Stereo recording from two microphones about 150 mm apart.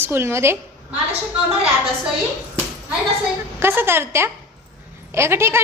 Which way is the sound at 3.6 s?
15° right (ahead or behind).